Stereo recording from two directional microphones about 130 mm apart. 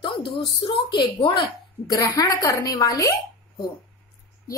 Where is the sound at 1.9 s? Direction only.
25° left (ahead or behind).